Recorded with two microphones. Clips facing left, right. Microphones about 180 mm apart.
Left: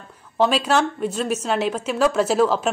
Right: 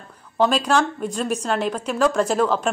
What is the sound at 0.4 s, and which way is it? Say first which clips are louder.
A woman's voice: even; 5° left (ahead or behind).